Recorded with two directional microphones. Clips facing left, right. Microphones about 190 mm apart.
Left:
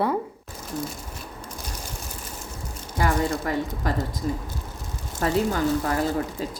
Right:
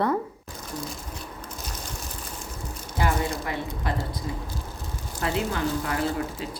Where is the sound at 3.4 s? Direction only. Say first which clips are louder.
Left 4 dB; 40° left (ahead or behind).